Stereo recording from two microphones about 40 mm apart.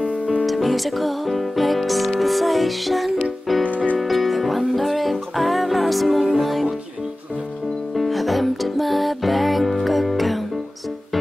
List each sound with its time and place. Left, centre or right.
0.0 s music: left
0.5 s music: centre
3.6 s music: left
4.0 s music: centre
7.9 s music: centre